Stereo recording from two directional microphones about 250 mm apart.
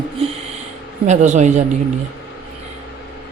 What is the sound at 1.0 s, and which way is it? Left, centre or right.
Speech, right.